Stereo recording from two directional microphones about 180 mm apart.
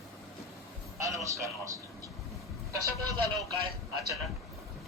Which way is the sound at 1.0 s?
20° right (ahead or behind).